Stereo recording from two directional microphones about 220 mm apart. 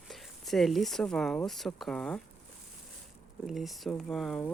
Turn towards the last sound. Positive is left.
turn(degrees=0)  # may be behind; listen again after turning